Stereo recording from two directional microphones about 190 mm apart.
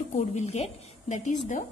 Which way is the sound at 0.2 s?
35° left (ahead or behind).